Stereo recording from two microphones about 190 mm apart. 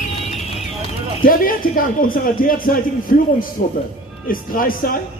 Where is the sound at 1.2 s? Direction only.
45° left (ahead or behind).